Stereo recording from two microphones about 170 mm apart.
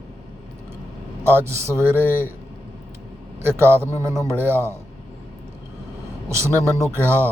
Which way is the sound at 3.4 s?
15° right (ahead or behind).